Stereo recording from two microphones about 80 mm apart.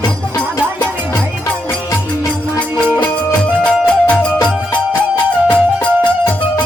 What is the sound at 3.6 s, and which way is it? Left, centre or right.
Music, centre.